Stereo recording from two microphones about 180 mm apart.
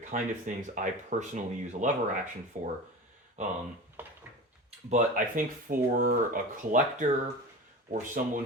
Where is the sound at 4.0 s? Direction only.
10° right (ahead or behind).